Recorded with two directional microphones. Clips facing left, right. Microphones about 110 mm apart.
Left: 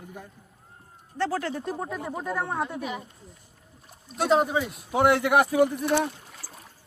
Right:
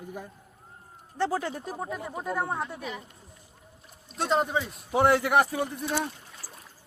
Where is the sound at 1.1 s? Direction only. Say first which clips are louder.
Even; 15° right (ahead or behind).